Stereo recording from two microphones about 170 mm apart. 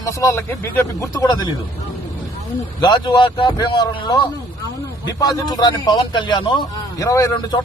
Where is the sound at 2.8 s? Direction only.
25° left (ahead or behind).